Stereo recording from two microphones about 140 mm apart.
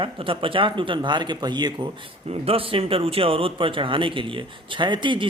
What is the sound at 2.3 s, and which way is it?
Speech, 45° right (ahead or behind).